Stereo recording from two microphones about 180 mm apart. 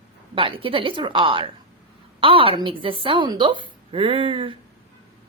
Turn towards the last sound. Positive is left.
turn(degrees=-30)  # may be behind; listen again after turning